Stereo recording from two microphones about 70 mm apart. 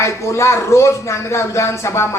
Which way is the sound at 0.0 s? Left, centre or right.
Left.